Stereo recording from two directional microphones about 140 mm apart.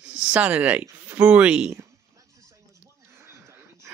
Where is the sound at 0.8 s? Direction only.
20° right (ahead or behind).